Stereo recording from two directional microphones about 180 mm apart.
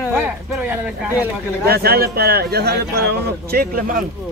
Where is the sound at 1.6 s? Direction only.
60° right (ahead or behind).